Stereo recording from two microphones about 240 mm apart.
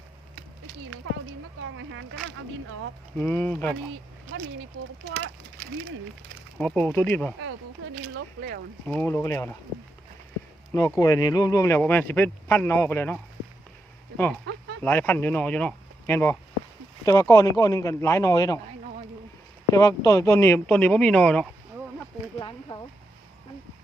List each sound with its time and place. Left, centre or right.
1.7 s speech: right
3.2 s speech: centre
5.1 s speech: right
6.6 s speech: centre
8.9 s speech: centre
10.7 s speech: centre
14.8 s speech: centre
19.7 s speech: centre
22.4 s a sound: centre